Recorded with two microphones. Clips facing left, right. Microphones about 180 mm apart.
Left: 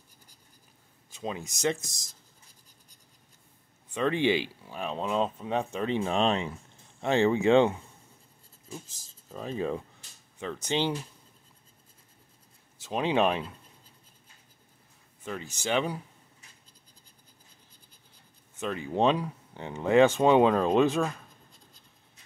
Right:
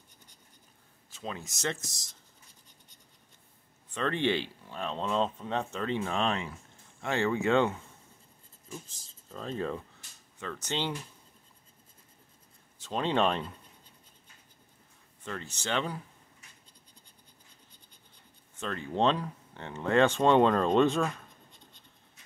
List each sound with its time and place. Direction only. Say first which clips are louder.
1.1 s speech: left 4 dB; 15° left (ahead or behind)
3.9 s speech: left 3 dB; 10° left (ahead or behind)
9.3 s speech: left 3 dB; 10° left (ahead or behind)
12.8 s speech: left 2 dB; 10° left (ahead or behind)
15.2 s speech: left 3 dB; 10° left (ahead or behind)
18.6 s speech: left 2 dB; 10° left (ahead or behind)